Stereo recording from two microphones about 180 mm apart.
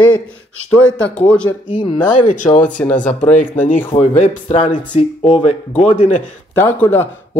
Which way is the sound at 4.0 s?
35° left (ahead or behind).